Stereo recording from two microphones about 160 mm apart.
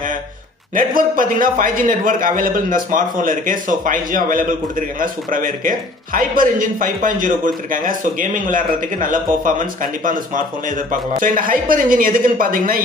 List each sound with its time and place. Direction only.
0.7 s a man's voice: 60° right (ahead or behind)